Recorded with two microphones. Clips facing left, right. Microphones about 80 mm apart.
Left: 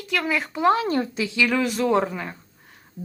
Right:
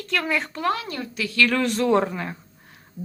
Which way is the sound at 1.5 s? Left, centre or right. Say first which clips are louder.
Right 1 dB; centre.